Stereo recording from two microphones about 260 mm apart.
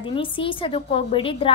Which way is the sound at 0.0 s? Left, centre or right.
Centre.